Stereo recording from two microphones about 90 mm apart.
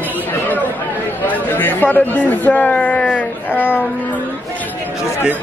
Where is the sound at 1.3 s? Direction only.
20° left (ahead or behind).